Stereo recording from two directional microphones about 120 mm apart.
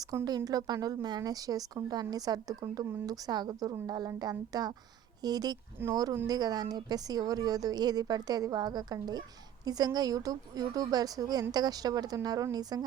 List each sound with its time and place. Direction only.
0.3 s a woman's voice: 35° right (ahead or behind)